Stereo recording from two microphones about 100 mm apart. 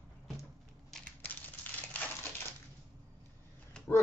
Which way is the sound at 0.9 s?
15° left (ahead or behind).